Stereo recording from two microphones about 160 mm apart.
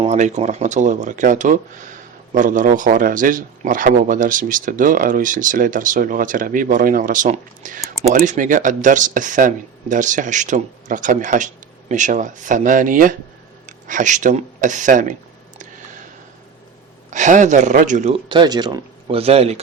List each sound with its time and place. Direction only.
0.0 s speech: 45° right (ahead or behind)
17.1 s speech: 50° right (ahead or behind)
18.3 s speech: 25° right (ahead or behind)